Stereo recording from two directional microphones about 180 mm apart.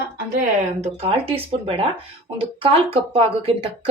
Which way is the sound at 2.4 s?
30° right (ahead or behind).